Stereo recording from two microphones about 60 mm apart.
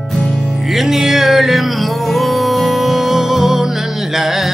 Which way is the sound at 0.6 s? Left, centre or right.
Centre.